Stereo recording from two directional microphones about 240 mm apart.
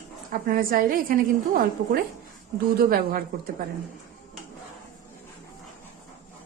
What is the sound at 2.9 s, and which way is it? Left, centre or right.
Speech, right.